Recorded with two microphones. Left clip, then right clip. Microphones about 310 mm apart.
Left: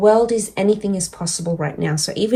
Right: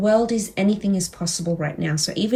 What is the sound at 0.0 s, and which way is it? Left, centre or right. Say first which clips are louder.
Speech: left 5 dB; centre.